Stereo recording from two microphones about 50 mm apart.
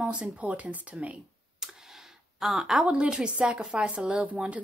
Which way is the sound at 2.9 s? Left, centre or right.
Centre.